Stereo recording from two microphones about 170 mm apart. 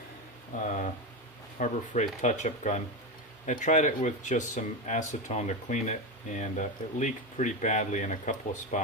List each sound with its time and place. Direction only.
1.5 s speech: 45° left (ahead or behind)